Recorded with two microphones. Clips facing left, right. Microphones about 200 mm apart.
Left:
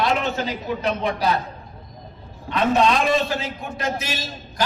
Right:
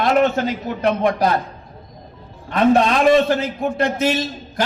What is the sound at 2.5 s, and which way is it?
A man's voice, 55° right (ahead or behind).